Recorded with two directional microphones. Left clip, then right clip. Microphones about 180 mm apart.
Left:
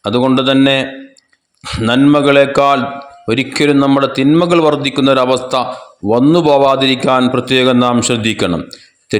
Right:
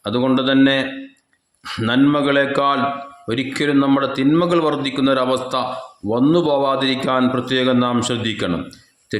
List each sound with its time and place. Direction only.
0.0 s a man's voice: 35° left (ahead or behind)